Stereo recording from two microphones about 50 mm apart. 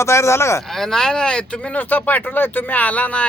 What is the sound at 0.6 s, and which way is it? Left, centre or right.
Speech, centre.